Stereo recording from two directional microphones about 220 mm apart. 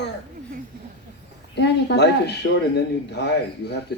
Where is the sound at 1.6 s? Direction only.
50° left (ahead or behind).